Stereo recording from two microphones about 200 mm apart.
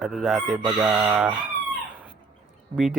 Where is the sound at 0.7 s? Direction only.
15° right (ahead or behind).